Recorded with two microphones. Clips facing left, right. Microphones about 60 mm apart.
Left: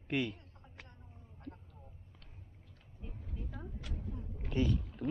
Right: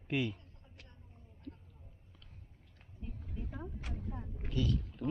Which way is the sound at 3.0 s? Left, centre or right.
Centre.